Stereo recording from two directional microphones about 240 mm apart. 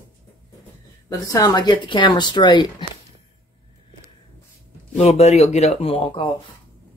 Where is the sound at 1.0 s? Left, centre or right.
Centre.